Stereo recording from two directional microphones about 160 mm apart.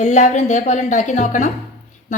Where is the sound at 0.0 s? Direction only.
50° left (ahead or behind).